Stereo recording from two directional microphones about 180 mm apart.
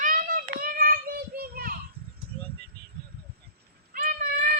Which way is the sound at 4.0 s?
55° right (ahead or behind).